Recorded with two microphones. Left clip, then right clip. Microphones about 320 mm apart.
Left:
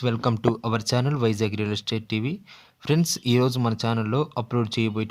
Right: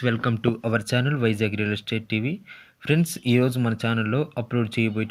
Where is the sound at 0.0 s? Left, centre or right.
Centre.